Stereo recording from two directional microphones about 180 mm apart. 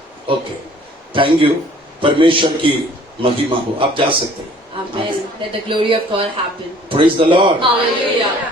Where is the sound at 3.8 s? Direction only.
30° right (ahead or behind).